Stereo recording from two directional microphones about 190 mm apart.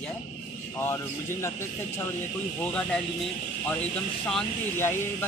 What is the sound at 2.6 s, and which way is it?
Speech, 5° left (ahead or behind).